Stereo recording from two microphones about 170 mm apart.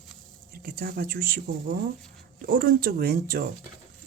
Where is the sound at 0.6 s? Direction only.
60° right (ahead or behind).